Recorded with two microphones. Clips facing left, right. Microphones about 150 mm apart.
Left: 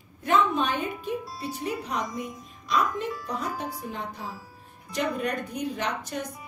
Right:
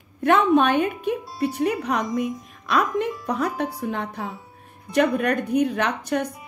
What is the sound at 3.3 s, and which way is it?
Music, 65° right (ahead or behind).